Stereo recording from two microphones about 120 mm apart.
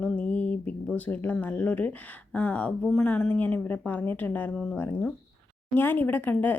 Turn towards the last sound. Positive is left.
turn(degrees=15)  # may be behind; listen again after turning